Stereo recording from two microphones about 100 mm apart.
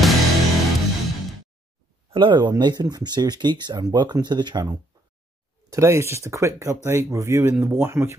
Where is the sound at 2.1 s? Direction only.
55° right (ahead or behind).